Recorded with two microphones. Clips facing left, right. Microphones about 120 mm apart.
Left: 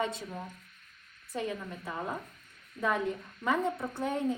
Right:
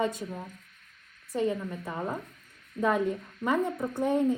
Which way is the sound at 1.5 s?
20° right (ahead or behind).